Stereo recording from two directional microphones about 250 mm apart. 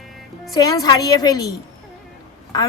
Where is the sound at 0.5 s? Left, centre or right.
Centre.